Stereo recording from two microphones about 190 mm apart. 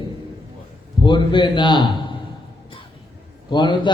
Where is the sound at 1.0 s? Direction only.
25° left (ahead or behind).